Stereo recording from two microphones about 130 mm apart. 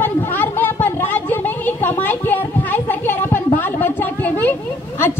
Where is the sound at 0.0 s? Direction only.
15° left (ahead or behind).